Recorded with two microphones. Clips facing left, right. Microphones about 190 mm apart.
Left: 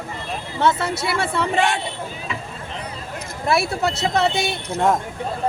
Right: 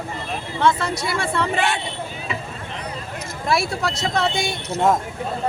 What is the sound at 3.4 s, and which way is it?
Speech, centre (ahead or behind).